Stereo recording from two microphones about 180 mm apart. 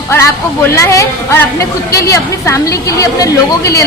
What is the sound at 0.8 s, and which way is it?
A woman's voice, 15° left (ahead or behind).